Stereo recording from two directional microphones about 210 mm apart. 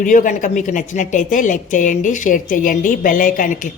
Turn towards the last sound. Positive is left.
turn(degrees=40)  # may be behind; listen again after turning